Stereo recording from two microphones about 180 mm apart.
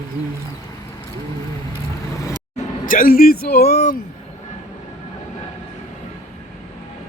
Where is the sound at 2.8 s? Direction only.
50° left (ahead or behind).